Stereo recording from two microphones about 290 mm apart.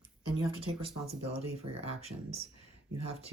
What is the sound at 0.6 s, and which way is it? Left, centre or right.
Speech, right.